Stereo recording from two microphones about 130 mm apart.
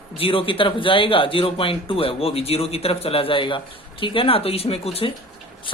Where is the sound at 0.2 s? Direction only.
45° left (ahead or behind).